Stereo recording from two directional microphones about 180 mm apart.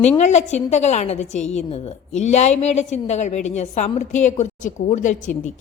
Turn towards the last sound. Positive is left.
turn(degrees=45)  # may be behind; listen again after turning